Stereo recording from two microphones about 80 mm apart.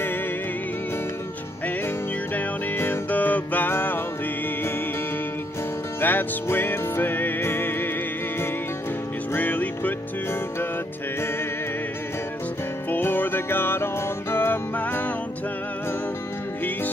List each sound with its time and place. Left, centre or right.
2.3 s music: left
5.9 s music: left
9.3 s music: left
12.9 s music: left